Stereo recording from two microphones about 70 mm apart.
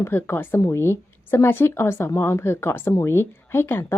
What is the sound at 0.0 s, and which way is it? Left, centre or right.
A woman's voice, left.